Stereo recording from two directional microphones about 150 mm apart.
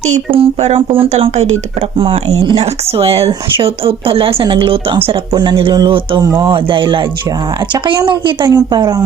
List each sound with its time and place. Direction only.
0.0 s speech: 45° right (ahead or behind)
2.0 s speech: 35° right (ahead or behind)